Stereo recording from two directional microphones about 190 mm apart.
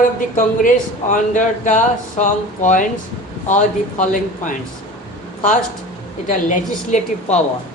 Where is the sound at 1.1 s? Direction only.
40° left (ahead or behind).